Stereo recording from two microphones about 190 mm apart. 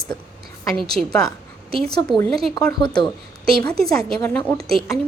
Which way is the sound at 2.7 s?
25° left (ahead or behind).